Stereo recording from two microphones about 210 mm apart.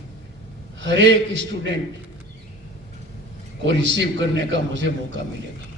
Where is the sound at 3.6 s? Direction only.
60° right (ahead or behind).